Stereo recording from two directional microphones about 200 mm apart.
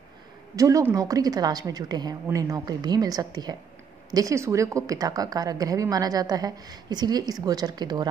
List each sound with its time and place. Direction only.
0.6 s a woman's voice: 15° right (ahead or behind)